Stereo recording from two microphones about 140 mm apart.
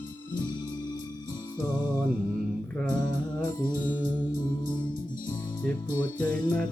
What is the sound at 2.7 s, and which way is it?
Music, 10° left (ahead or behind).